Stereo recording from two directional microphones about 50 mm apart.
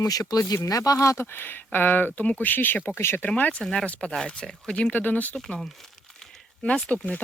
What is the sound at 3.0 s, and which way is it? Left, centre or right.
Speech, left.